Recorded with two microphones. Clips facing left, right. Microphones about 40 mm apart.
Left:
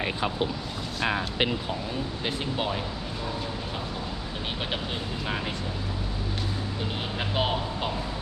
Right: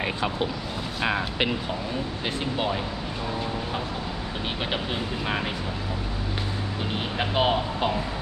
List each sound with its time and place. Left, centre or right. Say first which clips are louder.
2.2 s speech: right 2 dB; centre
7.2 s speech: right 5 dB; centre